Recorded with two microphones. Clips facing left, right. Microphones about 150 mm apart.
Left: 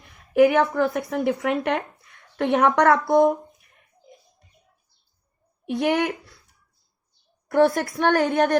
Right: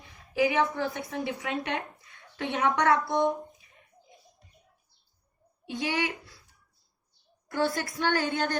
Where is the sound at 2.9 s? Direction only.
50° left (ahead or behind).